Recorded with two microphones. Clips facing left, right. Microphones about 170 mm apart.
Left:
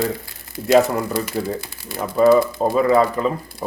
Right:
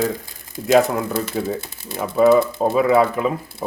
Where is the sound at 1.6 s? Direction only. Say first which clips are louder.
Right 1 dB; 20° right (ahead or behind).